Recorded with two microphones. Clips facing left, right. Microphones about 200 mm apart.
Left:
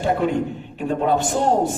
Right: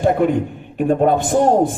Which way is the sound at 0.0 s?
55° right (ahead or behind).